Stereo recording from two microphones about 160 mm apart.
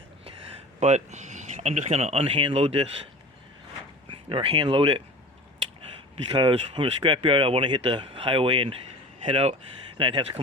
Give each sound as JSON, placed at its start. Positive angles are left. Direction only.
{"t": 0.8, "sound": "speech", "side_deg": -45}
{"t": 4.3, "sound": "speech", "side_deg": -30}
{"t": 6.3, "sound": "speech", "side_deg": -30}